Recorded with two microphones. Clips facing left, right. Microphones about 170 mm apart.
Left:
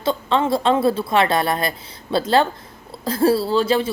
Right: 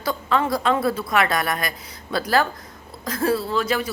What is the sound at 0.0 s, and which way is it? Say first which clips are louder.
A woman's voice: left 3 dB; 25° left (ahead or behind).